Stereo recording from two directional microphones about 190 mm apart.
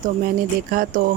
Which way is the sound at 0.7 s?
50° right (ahead or behind).